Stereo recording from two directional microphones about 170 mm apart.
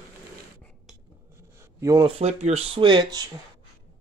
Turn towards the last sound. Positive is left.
turn(degrees=-25)  # may be behind; listen again after turning